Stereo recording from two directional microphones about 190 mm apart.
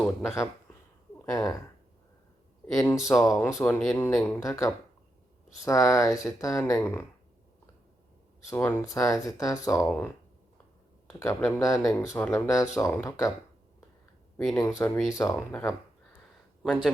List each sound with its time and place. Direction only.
0.0 s speech: centre (ahead or behind)
1.2 s speech: 15° left (ahead or behind)
2.7 s speech: 15° left (ahead or behind)
4.4 s speech: 15° left (ahead or behind)
8.4 s speech: 10° left (ahead or behind)
11.1 s speech: 15° left (ahead or behind)
14.3 s speech: 5° left (ahead or behind)